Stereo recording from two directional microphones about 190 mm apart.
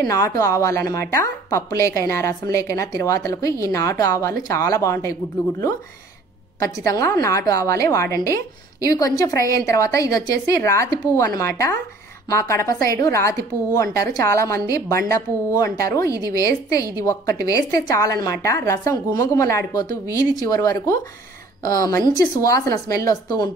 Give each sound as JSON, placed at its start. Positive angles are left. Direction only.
{"t": 0.1, "sound": "a woman's voice", "side_deg": 15}
{"t": 6.6, "sound": "a woman's voice", "side_deg": 15}